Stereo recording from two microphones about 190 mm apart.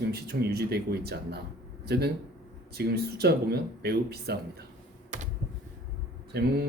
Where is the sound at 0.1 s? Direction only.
55° right (ahead or behind).